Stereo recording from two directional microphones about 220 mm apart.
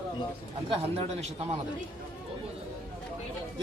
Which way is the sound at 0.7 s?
25° right (ahead or behind).